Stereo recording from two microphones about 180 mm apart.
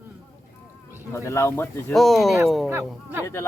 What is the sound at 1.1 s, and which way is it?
Speech, 15° left (ahead or behind).